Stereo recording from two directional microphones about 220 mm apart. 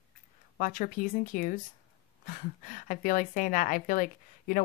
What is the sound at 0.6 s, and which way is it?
A woman's voice, 35° left (ahead or behind).